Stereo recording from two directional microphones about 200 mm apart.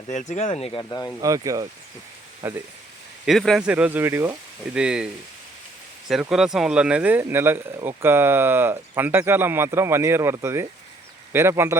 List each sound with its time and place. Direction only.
0.1 s speech: 35° left (ahead or behind); by 1.1 s 20° left (ahead or behind)
1.2 s speech: 15° right (ahead or behind)
3.2 s speech: centre (ahead or behind)
6.1 s speech: centre (ahead or behind)